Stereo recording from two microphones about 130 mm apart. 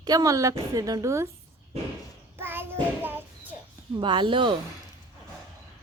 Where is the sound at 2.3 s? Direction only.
15° right (ahead or behind).